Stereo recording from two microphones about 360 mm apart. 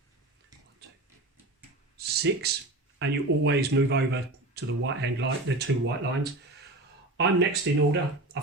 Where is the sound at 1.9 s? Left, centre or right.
Right.